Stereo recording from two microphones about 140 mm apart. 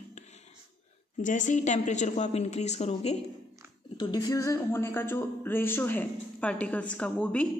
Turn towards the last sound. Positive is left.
turn(degrees=10)  # may be behind; listen again after turning